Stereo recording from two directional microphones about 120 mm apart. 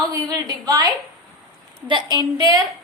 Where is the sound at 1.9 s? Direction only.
40° right (ahead or behind).